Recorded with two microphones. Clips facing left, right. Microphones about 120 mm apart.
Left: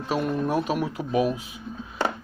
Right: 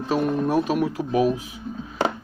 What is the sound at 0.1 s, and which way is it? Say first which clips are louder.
Speech: right 3 dB; 40° right (ahead or behind).